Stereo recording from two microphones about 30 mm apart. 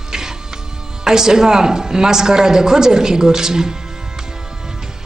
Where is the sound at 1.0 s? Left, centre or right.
Centre.